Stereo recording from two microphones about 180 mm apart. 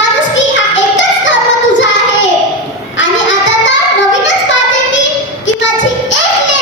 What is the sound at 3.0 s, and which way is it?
Child singing, 90° left.